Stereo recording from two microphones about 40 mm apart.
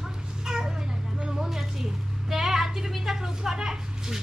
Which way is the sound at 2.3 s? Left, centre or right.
Centre.